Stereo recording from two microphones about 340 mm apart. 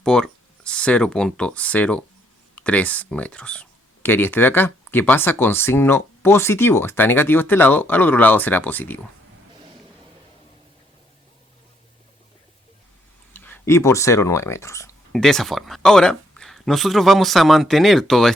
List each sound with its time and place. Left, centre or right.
0.0 s speech: centre
13.3 s speech: centre